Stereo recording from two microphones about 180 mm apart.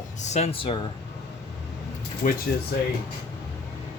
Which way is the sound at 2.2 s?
50° left (ahead or behind).